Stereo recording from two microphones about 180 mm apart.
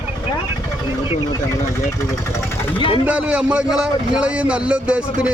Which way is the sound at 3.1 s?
5° right (ahead or behind).